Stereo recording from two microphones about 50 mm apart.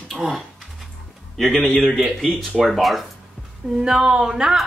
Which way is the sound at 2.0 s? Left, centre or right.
Centre.